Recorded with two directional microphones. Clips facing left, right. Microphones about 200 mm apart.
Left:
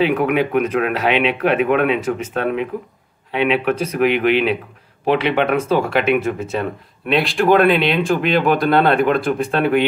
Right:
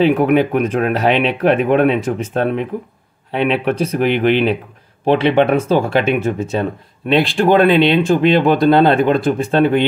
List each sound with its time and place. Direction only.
0.0 s speech: 35° right (ahead or behind)